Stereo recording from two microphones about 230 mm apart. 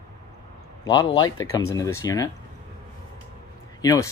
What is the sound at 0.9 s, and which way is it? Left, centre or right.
Speech, centre.